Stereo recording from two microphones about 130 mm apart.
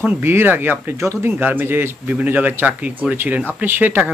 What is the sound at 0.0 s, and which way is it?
Speech, 15° right (ahead or behind).